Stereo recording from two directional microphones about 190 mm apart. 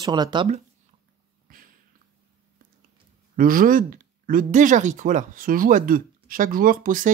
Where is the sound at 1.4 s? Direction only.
50° right (ahead or behind).